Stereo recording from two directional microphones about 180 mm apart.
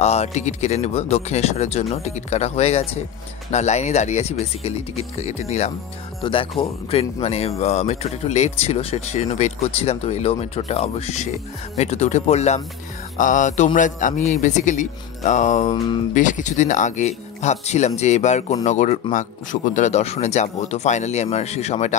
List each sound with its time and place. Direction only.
0.0 s speech: 35° left (ahead or behind)